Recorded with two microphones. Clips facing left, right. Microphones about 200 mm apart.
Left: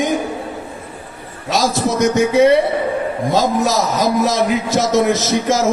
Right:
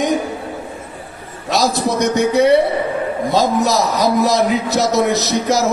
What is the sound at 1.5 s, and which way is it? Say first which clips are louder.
Speech: even; 50° left (ahead or behind).